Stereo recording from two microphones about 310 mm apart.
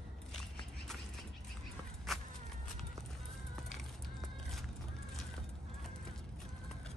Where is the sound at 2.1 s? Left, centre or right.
Centre.